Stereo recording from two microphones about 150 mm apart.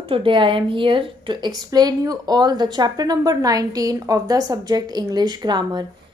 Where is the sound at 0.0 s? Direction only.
35° right (ahead or behind).